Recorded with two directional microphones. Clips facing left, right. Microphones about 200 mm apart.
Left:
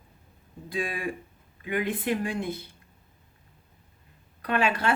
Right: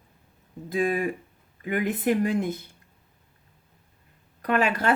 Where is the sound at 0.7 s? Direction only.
45° right (ahead or behind).